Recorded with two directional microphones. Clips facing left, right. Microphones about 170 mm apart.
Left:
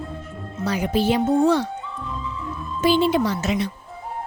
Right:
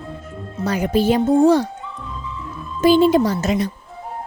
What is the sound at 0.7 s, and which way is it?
A woman's voice, 50° right (ahead or behind).